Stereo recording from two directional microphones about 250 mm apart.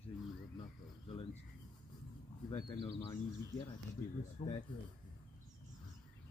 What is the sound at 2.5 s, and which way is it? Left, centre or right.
Speech, centre.